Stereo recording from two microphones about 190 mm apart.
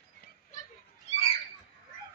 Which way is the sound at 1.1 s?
30° left (ahead or behind).